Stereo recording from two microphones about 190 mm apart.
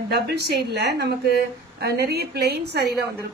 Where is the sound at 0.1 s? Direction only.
60° right (ahead or behind).